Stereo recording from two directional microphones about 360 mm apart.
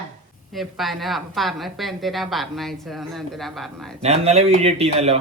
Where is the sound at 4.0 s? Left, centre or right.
Centre.